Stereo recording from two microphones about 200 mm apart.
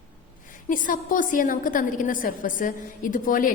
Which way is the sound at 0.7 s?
40° left (ahead or behind).